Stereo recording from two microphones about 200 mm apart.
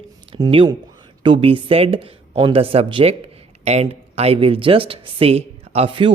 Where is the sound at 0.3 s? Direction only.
20° right (ahead or behind).